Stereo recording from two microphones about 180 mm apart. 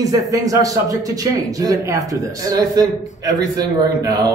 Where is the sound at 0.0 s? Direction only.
20° right (ahead or behind).